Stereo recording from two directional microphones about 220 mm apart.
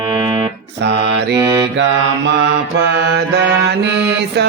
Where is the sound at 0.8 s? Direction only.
50° right (ahead or behind).